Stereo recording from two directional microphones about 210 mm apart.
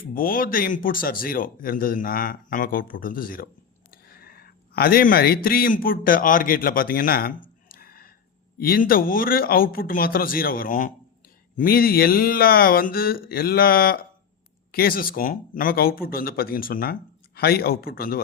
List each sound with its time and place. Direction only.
0.1 s speech: 45° left (ahead or behind)